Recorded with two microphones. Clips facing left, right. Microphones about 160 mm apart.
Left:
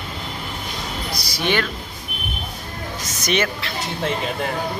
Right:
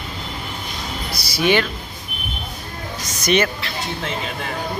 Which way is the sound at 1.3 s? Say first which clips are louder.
Right 4 dB; 10° right (ahead or behind).